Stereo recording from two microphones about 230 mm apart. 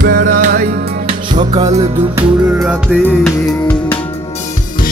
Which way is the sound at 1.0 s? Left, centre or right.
Right.